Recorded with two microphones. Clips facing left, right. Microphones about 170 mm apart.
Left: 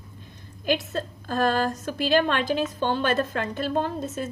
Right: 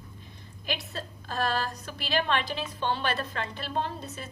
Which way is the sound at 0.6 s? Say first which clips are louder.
Left 10 dB; 45° left (ahead or behind).